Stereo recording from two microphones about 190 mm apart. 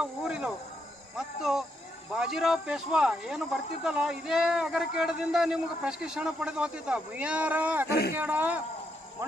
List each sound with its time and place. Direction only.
0.0 s a man's voice: 5° right (ahead or behind)
7.9 s speech: 60° left (ahead or behind)
8.1 s speech: 10° right (ahead or behind)